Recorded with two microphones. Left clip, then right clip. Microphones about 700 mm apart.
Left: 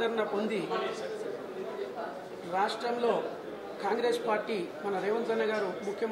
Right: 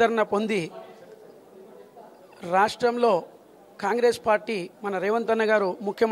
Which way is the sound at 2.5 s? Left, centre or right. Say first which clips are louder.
Right 9 dB; right.